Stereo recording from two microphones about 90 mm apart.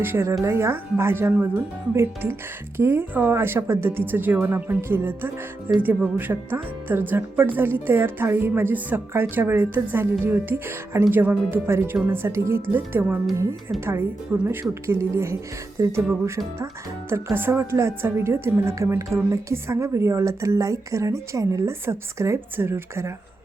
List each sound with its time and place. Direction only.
0.0 s speech: 30° right (ahead or behind)
14.4 s a woman's voice: 30° right (ahead or behind)
17.1 s a woman's voice: 30° right (ahead or behind)